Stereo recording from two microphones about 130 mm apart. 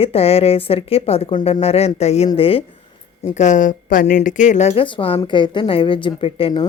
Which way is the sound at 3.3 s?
70° left (ahead or behind).